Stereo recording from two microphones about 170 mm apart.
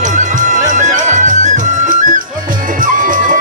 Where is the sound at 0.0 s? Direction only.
45° right (ahead or behind).